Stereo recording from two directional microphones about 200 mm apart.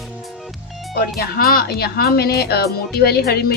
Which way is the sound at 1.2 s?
50° left (ahead or behind).